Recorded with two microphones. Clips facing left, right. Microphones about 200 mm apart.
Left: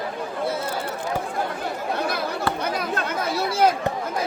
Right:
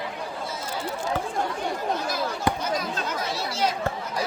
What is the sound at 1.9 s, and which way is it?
Chatter, 60° left (ahead or behind).